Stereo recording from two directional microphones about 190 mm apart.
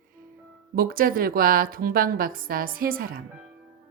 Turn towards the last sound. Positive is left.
turn(degrees=-50)  # may be behind; listen again after turning